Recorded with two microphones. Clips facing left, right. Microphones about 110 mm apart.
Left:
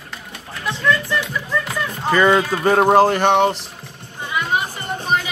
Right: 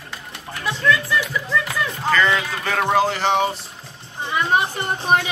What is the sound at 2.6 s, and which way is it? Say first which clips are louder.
Speech: left 6 dB; 40° left (ahead or behind).